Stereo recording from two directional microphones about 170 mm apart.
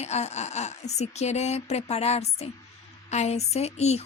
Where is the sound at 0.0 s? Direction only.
40° left (ahead or behind).